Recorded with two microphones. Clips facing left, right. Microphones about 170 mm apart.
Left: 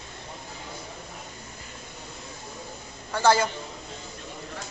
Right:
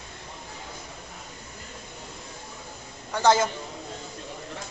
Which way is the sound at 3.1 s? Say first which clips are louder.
Even; 20° right (ahead or behind).